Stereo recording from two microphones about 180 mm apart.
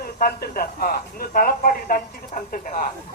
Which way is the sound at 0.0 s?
55° left (ahead or behind).